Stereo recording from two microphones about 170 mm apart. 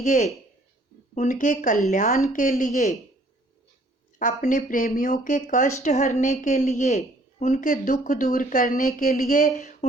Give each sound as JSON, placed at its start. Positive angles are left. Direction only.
{"t": 0.0, "sound": "a woman's voice", "side_deg": 40}
{"t": 4.2, "sound": "a woman's voice", "side_deg": 50}